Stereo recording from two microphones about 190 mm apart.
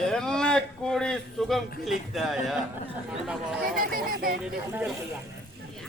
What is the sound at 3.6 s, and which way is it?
Speech, 50° right (ahead or behind).